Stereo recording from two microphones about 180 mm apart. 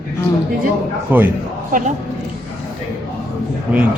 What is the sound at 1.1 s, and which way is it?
Speech, 10° right (ahead or behind).